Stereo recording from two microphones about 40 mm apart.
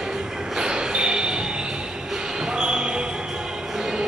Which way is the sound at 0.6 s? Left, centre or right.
Right.